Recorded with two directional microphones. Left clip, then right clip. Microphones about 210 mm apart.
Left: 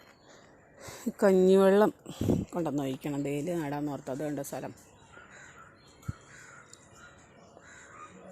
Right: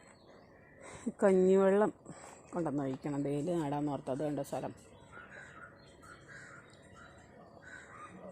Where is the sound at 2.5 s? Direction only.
20° left (ahead or behind).